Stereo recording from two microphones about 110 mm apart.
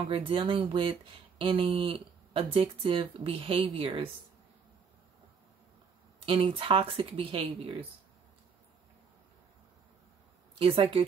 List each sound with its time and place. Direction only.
0.0 s speech: 55° right (ahead or behind)
6.2 s speech: 50° right (ahead or behind)
10.6 s speech: 55° right (ahead or behind)